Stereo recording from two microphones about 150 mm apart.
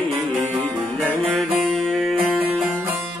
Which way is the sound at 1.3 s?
5° left (ahead or behind).